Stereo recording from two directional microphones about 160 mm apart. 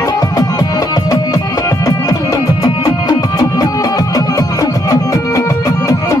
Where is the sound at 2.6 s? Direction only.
25° left (ahead or behind).